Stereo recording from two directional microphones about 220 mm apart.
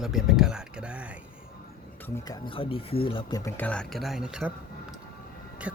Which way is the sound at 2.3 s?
25° left (ahead or behind).